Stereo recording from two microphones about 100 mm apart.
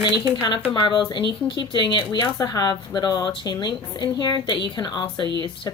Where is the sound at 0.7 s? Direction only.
50° left (ahead or behind).